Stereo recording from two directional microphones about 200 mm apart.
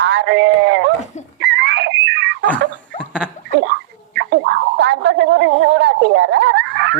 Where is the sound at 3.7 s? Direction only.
60° right (ahead or behind).